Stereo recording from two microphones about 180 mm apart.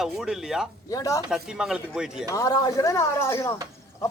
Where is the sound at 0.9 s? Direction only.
20° left (ahead or behind).